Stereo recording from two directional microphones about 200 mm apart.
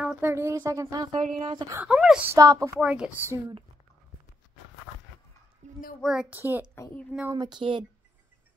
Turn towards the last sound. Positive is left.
turn(degrees=-25)  # may be behind; listen again after turning